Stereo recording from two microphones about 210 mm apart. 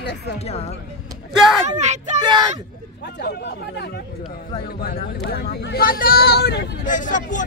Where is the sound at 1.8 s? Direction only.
35° right (ahead or behind).